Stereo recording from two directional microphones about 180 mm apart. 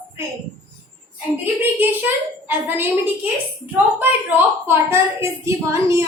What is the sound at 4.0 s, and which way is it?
A woman's voice, 10° right (ahead or behind).